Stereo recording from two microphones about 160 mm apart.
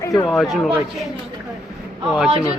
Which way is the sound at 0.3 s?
Centre (ahead or behind).